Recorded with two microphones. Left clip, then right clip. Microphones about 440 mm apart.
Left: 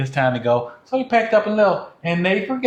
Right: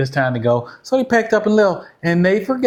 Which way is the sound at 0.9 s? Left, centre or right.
Right.